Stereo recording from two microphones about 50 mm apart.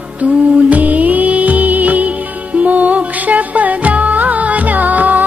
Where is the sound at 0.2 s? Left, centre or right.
Right.